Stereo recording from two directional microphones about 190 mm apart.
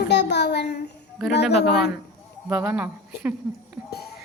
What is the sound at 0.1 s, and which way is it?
Child singing, 65° left (ahead or behind).